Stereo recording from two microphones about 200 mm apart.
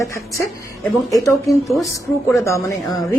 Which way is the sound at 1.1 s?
15° left (ahead or behind).